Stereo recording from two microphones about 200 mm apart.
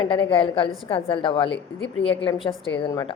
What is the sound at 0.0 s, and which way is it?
Speech, 25° left (ahead or behind).